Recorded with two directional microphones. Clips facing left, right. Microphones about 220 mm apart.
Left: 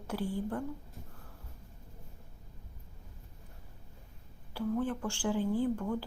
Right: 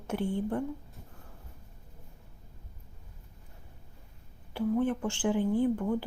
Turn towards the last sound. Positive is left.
turn(degrees=-20)  # may be behind; listen again after turning